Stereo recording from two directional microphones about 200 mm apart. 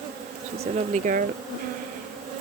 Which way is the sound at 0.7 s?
40° right (ahead or behind).